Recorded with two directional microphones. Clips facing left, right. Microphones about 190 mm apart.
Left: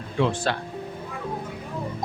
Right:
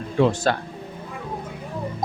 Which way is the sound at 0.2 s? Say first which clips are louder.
Right 4 dB; 40° right (ahead or behind).